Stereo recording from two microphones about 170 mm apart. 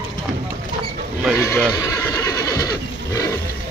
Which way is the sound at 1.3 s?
15° left (ahead or behind).